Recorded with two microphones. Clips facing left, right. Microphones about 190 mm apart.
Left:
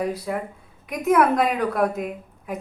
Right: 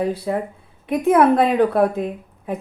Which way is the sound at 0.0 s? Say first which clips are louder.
Right 4 dB; 30° right (ahead or behind).